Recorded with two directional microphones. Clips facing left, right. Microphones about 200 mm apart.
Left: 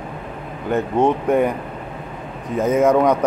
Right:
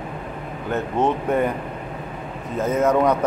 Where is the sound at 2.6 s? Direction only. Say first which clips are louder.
Left 3 dB; 10° left (ahead or behind).